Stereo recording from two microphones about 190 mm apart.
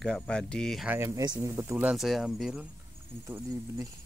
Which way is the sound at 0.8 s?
15° right (ahead or behind).